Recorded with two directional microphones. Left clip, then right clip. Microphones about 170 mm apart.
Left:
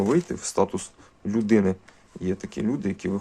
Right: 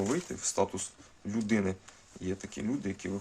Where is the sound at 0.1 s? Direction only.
40° left (ahead or behind).